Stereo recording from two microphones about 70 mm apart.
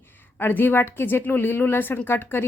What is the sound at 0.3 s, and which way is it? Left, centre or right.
A woman's voice, left.